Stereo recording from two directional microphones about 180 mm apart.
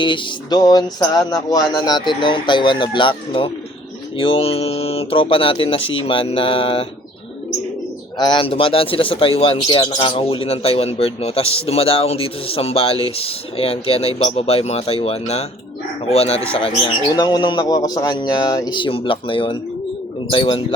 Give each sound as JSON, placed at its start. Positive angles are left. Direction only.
{"t": 0.0, "sound": "speech", "side_deg": 25}
{"t": 8.2, "sound": "speech", "side_deg": 25}